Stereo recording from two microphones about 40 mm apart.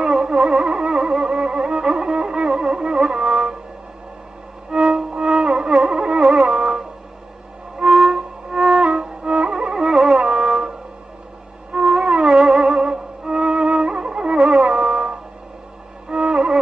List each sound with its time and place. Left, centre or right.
0.0 s music: centre
4.6 s music: centre
9.8 s music: centre
11.7 s music: centre